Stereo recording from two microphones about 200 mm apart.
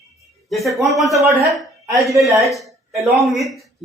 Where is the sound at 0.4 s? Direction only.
Centre (ahead or behind).